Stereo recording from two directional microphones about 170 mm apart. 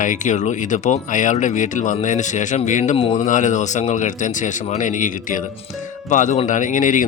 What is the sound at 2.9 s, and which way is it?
Speech, 35° left (ahead or behind).